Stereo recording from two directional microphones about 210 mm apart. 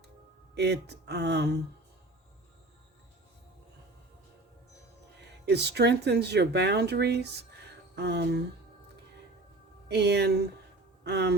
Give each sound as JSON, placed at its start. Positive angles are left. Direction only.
{"t": 0.5, "sound": "speech", "side_deg": -50}
{"t": 5.5, "sound": "speech", "side_deg": -50}
{"t": 9.9, "sound": "speech", "side_deg": -50}